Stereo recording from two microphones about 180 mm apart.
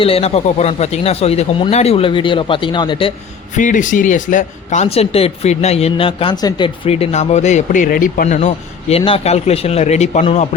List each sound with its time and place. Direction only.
0.0 s speech: 35° left (ahead or behind)
3.5 s speech: 45° left (ahead or behind); by 6.7 s 25° left (ahead or behind)
6.8 s speech: 35° left (ahead or behind)